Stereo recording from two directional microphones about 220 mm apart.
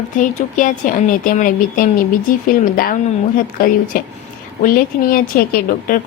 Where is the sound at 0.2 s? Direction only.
35° left (ahead or behind).